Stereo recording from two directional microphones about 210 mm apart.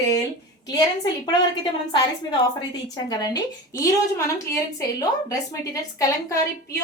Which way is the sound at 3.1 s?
20° left (ahead or behind).